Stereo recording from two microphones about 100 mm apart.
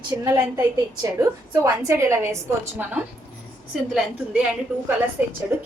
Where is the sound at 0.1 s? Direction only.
30° right (ahead or behind).